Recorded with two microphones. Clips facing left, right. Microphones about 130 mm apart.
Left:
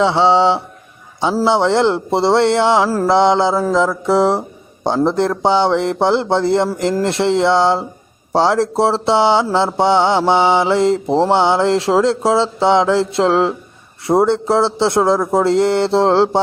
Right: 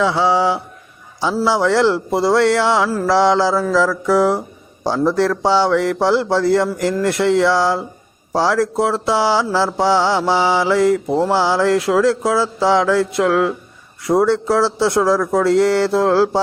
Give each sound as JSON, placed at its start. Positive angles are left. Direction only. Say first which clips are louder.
{"t": 0.0, "sound": "mantra", "louder": "left 3 dB", "side_deg": 25}